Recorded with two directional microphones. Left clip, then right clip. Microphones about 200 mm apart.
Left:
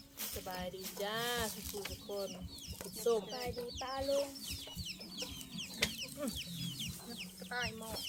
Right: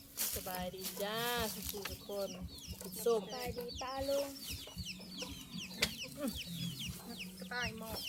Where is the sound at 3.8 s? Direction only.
20° left (ahead or behind).